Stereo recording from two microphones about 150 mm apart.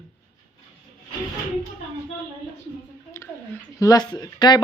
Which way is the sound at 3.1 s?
20° left (ahead or behind).